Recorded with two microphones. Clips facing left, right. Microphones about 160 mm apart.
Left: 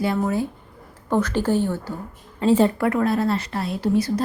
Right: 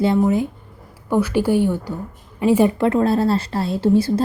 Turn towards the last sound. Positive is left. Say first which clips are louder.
# right 4 dB
turn(degrees=-30)  # may be behind; listen again after turning